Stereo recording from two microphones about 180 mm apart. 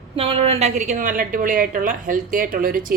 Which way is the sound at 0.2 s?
35° right (ahead or behind).